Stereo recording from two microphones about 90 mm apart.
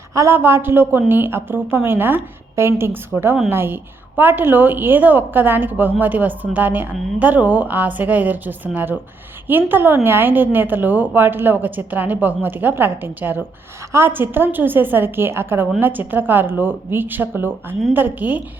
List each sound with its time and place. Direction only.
0.1 s a woman's voice: 35° right (ahead or behind)
0.3 s a woman's voice: 25° right (ahead or behind)